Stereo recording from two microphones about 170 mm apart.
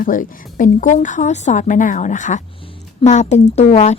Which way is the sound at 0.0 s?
55° left (ahead or behind).